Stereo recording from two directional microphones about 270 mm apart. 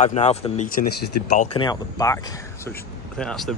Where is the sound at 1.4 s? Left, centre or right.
Centre.